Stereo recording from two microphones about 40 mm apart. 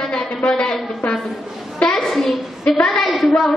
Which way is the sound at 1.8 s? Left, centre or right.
Left.